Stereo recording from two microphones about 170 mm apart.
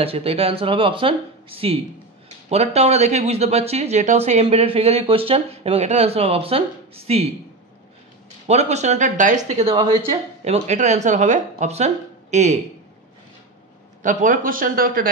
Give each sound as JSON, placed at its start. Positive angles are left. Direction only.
{"t": 0.0, "sound": "speech", "side_deg": -35}
{"t": 8.5, "sound": "speech", "side_deg": -40}
{"t": 14.0, "sound": "speech", "side_deg": -50}